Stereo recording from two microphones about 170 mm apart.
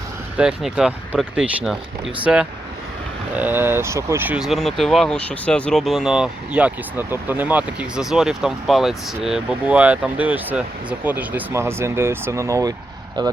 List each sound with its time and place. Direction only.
0.3 s speech: 5° right (ahead or behind); by 13.3 s 25° right (ahead or behind)